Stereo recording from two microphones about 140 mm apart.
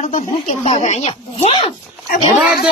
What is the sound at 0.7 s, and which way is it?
Speech, 45° left (ahead or behind).